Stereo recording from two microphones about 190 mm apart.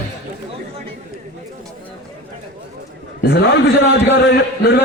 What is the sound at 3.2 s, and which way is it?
Speech, 60° left (ahead or behind).